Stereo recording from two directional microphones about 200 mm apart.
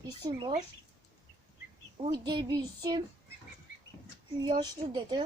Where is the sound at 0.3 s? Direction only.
20° right (ahead or behind).